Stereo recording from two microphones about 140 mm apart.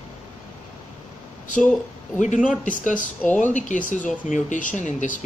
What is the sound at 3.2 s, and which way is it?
Speech, 10° left (ahead or behind).